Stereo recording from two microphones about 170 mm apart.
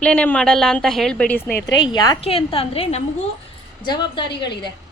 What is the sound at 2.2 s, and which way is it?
A woman's voice, 35° left (ahead or behind).